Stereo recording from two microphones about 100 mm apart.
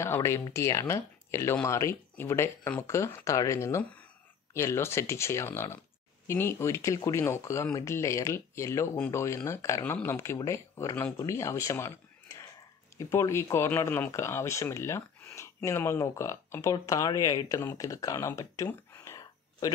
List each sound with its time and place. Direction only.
0.0 s speech: 25° left (ahead or behind)